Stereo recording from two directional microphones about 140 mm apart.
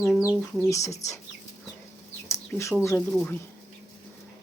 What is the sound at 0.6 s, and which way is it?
Speech, 20° left (ahead or behind).